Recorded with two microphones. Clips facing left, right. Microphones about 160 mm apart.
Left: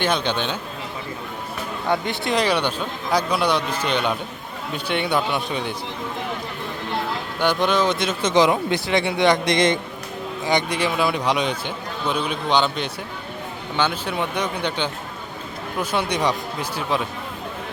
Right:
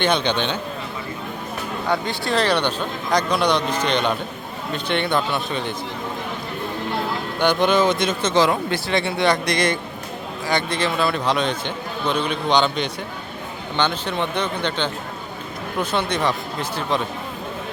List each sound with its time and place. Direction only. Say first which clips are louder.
0.0 s speech: right 2 dB; 5° left (ahead or behind)
1.9 s a man's voice: even; 20° left (ahead or behind)
7.3 s speech: right 2 dB; centre (ahead or behind)
8.2 s a man's voice: left 3 dB; 15° left (ahead or behind)